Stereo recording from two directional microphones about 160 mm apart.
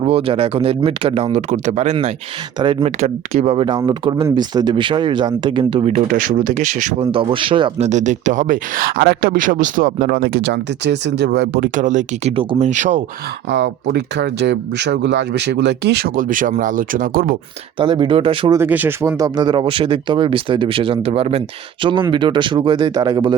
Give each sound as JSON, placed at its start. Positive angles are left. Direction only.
{"t": 0.0, "sound": "speech", "side_deg": -35}
{"t": 6.1, "sound": "speech", "side_deg": -60}
{"t": 7.1, "sound": "speech", "side_deg": -35}
{"t": 7.9, "sound": "speech", "side_deg": -50}
{"t": 11.7, "sound": "speech", "side_deg": -50}
{"t": 12.3, "sound": "speech", "side_deg": -35}
{"t": 13.5, "sound": "speech", "side_deg": -90}
{"t": 17.7, "sound": "speech", "side_deg": -30}
{"t": 18.5, "sound": "speech", "side_deg": -10}